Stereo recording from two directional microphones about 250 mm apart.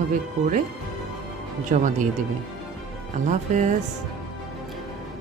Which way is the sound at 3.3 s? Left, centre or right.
Right.